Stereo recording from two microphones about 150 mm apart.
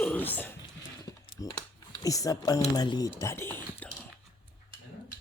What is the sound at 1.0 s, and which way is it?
Typing, 25° left (ahead or behind).